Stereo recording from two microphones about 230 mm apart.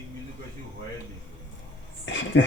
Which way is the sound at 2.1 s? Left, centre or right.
Left.